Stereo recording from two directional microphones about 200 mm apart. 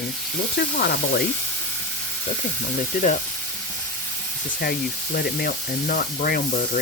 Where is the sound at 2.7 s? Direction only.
40° left (ahead or behind).